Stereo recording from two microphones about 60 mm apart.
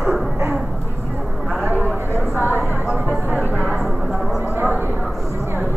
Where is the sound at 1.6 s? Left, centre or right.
Right.